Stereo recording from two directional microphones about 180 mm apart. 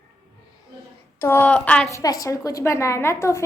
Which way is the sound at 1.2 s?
10° left (ahead or behind).